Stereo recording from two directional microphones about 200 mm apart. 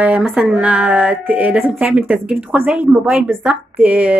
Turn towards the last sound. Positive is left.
turn(degrees=-5)  # may be behind; listen again after turning